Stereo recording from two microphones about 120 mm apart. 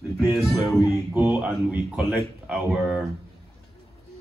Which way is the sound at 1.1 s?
15° right (ahead or behind).